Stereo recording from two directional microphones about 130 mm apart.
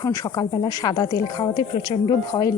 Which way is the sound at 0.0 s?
30° left (ahead or behind).